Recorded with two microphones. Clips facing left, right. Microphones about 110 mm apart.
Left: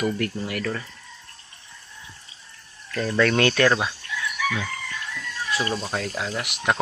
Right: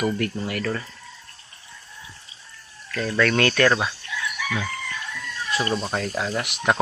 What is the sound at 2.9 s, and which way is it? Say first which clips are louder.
Speech: left 1 dB; 20° left (ahead or behind).